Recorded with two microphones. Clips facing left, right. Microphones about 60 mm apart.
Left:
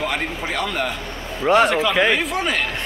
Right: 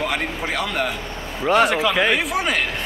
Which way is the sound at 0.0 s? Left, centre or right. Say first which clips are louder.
Even; centre.